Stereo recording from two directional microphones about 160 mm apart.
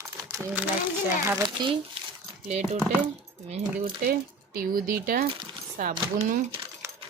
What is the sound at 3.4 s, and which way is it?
Speech, 50° right (ahead or behind).